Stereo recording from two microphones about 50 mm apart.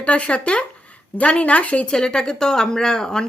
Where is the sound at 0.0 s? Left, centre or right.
Left.